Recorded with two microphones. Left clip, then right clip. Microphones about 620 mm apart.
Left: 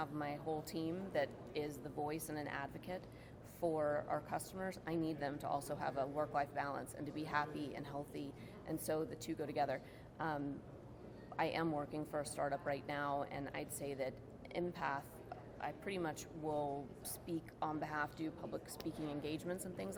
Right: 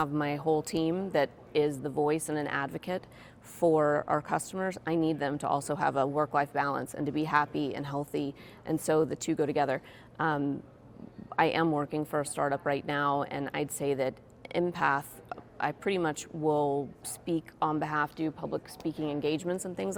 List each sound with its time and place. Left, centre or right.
0.0 s a woman's voice: right